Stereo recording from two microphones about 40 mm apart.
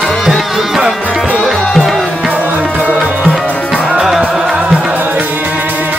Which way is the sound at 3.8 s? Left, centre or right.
Centre.